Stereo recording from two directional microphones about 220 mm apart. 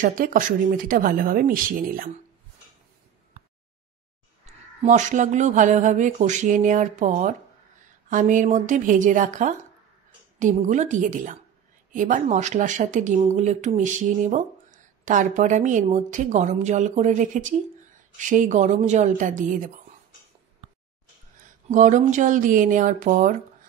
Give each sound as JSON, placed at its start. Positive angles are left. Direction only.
{"t": 0.0, "sound": "speech", "side_deg": -40}
{"t": 4.8, "sound": "speech", "side_deg": -35}
{"t": 21.4, "sound": "speech", "side_deg": -35}